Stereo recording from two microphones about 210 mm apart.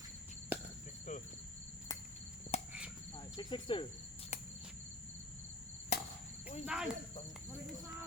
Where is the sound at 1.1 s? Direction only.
35° left (ahead or behind).